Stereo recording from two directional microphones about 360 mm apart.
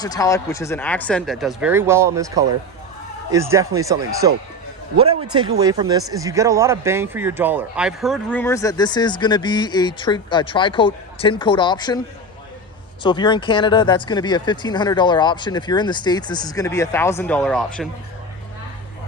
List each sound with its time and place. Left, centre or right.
0.0 s speech: centre
5.4 s speech: centre
13.0 s speech: centre